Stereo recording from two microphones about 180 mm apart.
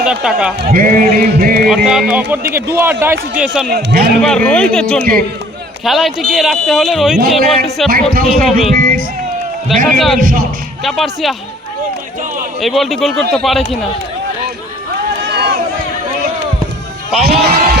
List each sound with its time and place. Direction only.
0.0 s speech: 5° right (ahead or behind)
0.6 s music: 55° right (ahead or behind)
1.6 s a man's voice: 5° right (ahead or behind)
3.7 s a man's voice: 60° right (ahead or behind)
4.2 s speech: 5° left (ahead or behind)
8.1 s music: 55° right (ahead or behind)
10.2 s music: 50° right (ahead or behind)
10.8 s speech: centre (ahead or behind)
12.5 s speech: centre (ahead or behind)
15.2 s a sound: 65° right (ahead or behind)
17.2 s a man's voice: 60° right (ahead or behind)